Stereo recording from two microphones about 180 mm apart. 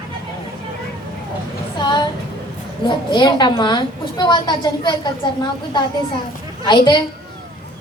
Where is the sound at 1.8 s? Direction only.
25° left (ahead or behind).